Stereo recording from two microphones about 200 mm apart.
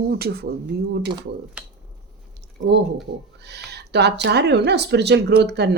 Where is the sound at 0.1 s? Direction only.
50° right (ahead or behind).